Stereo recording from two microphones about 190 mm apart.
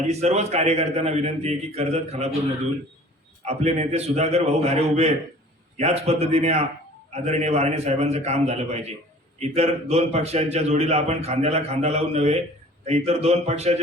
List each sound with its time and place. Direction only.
0.0 s a man's voice: 35° right (ahead or behind)
3.4 s a man's voice: 35° right (ahead or behind)